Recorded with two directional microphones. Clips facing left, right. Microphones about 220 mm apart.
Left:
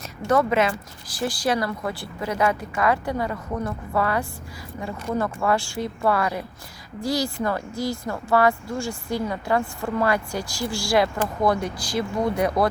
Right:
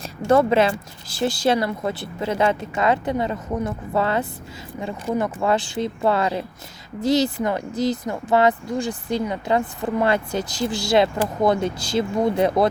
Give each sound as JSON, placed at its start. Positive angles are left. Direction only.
{"t": 0.0, "sound": "speech", "side_deg": -30}